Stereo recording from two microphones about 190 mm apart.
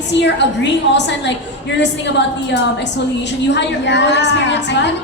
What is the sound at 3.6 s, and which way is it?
A woman's voice, 65° left (ahead or behind).